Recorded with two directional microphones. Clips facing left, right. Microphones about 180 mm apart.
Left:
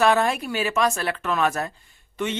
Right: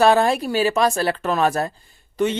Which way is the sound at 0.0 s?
35° right (ahead or behind).